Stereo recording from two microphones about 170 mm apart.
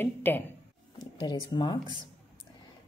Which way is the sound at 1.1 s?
25° left (ahead or behind).